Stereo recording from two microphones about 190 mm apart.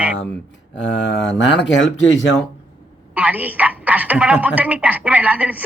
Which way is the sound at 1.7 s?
75° left (ahead or behind).